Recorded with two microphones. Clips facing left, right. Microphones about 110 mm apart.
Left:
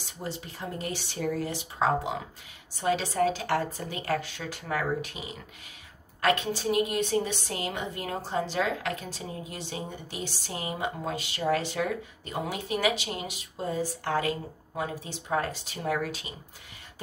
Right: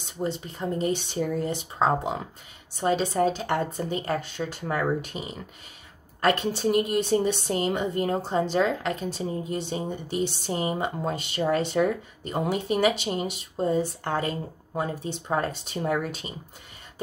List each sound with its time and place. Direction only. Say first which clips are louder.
0.0 s a woman's voice: right 7 dB; 25° right (ahead or behind)